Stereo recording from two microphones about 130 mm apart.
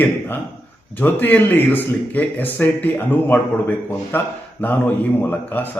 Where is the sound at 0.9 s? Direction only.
15° left (ahead or behind).